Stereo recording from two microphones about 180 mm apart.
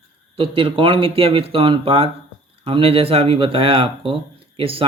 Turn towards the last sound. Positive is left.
turn(degrees=-30)  # may be behind; listen again after turning